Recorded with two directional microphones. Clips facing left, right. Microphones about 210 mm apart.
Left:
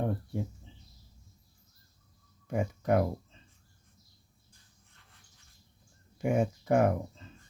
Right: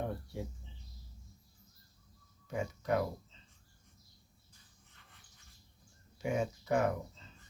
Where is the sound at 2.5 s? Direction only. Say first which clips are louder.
Left 5 dB; 55° left (ahead or behind).